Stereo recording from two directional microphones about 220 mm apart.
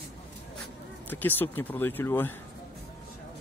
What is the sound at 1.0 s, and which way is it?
Speech, 10° left (ahead or behind).